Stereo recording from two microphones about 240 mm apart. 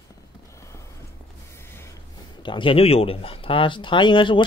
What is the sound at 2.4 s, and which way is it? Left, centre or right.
Speech, left.